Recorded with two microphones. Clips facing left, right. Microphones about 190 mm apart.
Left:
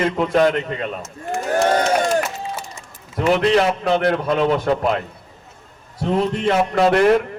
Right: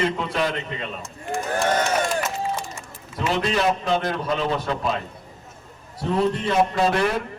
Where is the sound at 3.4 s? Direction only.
65° left (ahead or behind).